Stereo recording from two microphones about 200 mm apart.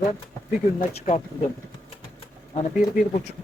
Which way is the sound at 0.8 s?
30° left (ahead or behind).